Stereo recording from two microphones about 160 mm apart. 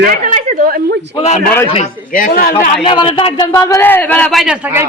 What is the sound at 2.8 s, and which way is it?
Speech, 30° left (ahead or behind).